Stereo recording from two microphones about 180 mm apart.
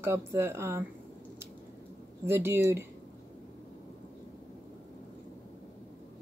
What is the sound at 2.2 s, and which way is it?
Speech, 15° right (ahead or behind).